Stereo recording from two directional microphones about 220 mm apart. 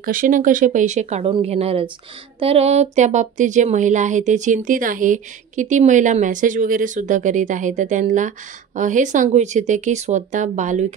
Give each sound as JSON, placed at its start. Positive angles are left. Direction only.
{"t": 0.0, "sound": "speech", "side_deg": -40}